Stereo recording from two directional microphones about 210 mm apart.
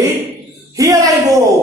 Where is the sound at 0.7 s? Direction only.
15° right (ahead or behind).